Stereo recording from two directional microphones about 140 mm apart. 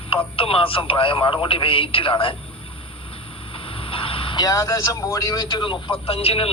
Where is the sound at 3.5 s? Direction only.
40° left (ahead or behind).